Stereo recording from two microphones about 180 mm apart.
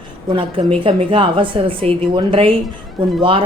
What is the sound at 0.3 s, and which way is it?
A woman's voice, 30° right (ahead or behind).